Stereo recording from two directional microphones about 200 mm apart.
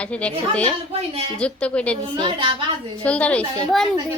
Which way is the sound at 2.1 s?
25° right (ahead or behind).